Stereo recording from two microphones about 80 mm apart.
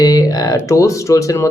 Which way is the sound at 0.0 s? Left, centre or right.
Left.